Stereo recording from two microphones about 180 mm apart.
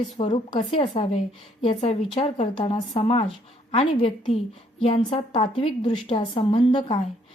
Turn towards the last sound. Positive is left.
turn(degrees=25)  # may be behind; listen again after turning